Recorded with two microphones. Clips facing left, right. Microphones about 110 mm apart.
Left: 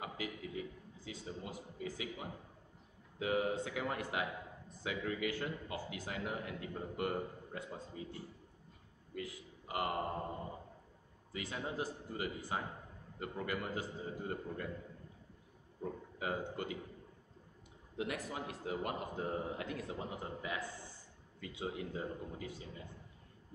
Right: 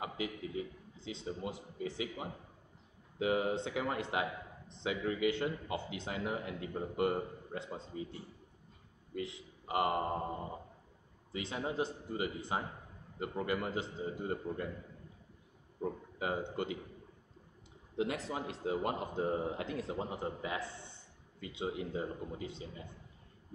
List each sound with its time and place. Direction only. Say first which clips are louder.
0.0 s a man's voice: right 4 dB; 25° right (ahead or behind)
9.1 s a man's voice: right 4 dB; 25° right (ahead or behind)
11.3 s a man's voice: right 4 dB; 25° right (ahead or behind)
15.8 s a man's voice: right 4 dB; 25° right (ahead or behind)
17.9 s a man's voice: right 4 dB; 25° right (ahead or behind)